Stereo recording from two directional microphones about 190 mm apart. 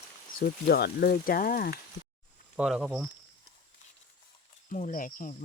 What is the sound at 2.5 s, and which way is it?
Speech, 5° right (ahead or behind).